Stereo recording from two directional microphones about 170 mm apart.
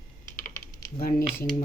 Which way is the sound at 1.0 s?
55° left (ahead or behind).